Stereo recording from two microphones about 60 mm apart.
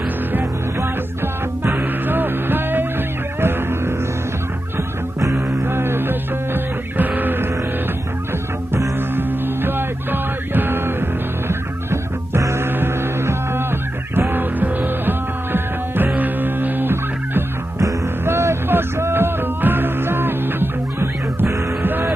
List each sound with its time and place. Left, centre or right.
1.2 s music: right
5.2 s music: right
5.6 s music: right
9.1 s music: right